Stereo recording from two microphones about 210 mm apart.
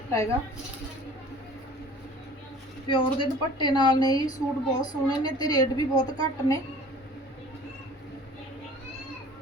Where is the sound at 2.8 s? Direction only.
25° left (ahead or behind).